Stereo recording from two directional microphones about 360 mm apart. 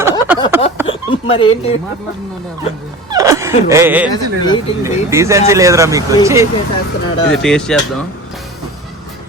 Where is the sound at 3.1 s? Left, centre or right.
Centre.